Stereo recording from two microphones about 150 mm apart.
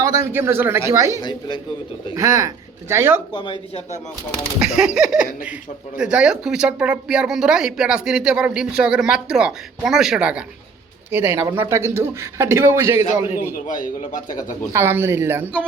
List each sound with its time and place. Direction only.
0.2 s a man's voice: 15° right (ahead or behind)
1.2 s speech: 30° left (ahead or behind)
2.1 s a man's voice: 20° right (ahead or behind)
3.3 s speech: 35° left (ahead or behind)
4.8 s a man's voice: 5° right (ahead or behind)
13.7 s a man's voice: 60° left (ahead or behind)
14.7 s a man's voice: 15° right (ahead or behind)